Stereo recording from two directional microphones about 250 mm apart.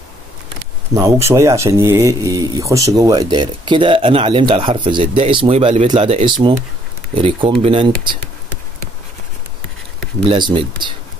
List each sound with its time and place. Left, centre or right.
0.9 s speech: centre
10.2 s speech: centre